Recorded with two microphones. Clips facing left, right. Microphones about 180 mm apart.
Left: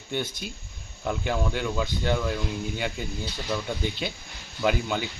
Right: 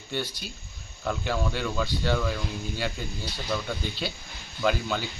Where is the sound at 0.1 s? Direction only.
20° left (ahead or behind).